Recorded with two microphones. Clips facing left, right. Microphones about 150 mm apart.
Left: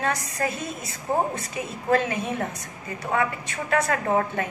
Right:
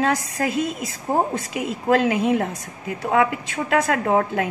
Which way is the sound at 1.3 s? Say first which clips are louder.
Right 6 dB; 90° right.